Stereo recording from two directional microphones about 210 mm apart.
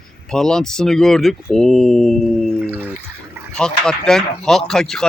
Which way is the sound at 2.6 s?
10° right (ahead or behind).